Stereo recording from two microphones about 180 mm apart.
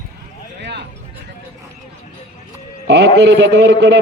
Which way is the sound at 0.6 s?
70° right (ahead or behind).